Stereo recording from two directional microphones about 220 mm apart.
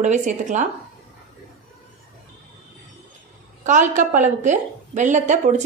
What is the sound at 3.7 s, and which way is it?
A woman's voice, 35° right (ahead or behind).